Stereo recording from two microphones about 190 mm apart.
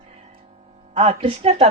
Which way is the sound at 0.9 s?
30° right (ahead or behind).